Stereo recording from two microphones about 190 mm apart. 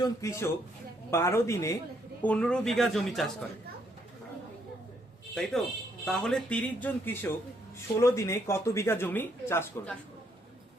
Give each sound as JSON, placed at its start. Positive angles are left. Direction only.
{"t": 0.0, "sound": "speech", "side_deg": 15}
{"t": 5.3, "sound": "speech", "side_deg": 0}